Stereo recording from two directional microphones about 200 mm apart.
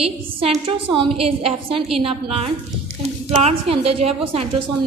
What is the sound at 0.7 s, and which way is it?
A woman's voice, 25° right (ahead or behind).